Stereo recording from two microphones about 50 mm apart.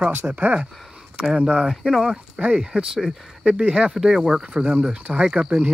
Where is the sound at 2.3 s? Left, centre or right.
Right.